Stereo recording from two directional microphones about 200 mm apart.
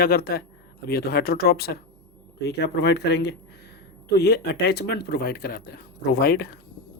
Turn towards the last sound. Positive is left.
turn(degrees=50)  # may be behind; listen again after turning